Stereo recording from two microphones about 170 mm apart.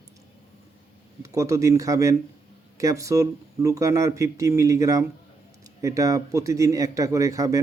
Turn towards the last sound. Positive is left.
turn(degrees=-20)  # may be behind; listen again after turning